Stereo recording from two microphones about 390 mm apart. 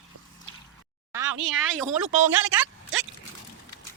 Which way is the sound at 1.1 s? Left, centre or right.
Centre.